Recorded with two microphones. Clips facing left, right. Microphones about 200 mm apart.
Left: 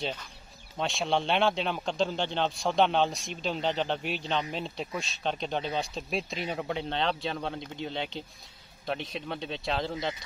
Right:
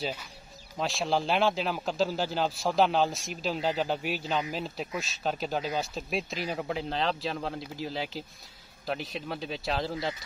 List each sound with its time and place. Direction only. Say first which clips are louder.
0.0 s a man's voice: even; 10° right (ahead or behind)